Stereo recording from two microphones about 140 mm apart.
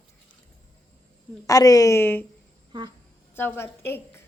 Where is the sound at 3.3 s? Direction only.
15° left (ahead or behind).